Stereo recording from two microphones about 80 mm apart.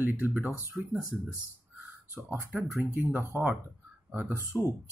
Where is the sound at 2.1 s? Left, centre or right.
Right.